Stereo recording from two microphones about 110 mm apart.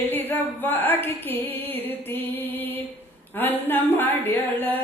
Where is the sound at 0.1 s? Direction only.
20° left (ahead or behind).